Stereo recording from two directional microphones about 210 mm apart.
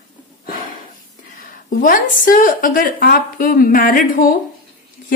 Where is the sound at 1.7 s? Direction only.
40° left (ahead or behind).